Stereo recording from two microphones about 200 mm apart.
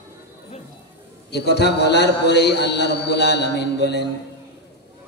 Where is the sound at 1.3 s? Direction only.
55° left (ahead or behind).